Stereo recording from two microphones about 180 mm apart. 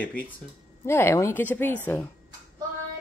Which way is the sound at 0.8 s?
15° left (ahead or behind).